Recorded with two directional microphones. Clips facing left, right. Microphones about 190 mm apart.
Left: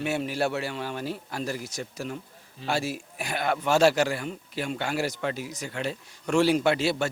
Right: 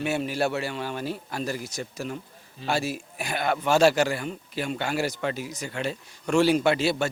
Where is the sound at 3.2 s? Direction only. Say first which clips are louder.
Right 1 dB; 15° right (ahead or behind).